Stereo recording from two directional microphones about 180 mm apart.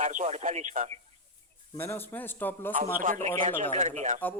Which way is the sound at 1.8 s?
10° left (ahead or behind).